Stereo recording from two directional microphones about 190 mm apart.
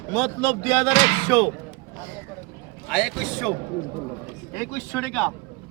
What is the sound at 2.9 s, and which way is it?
Speech, centre (ahead or behind).